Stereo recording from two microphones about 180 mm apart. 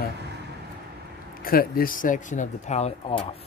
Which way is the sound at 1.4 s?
55° left (ahead or behind).